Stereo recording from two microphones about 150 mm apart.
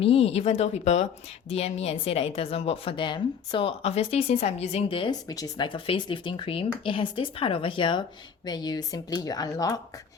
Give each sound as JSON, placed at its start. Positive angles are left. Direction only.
{"t": 0.0, "sound": "a woman's voice", "side_deg": 40}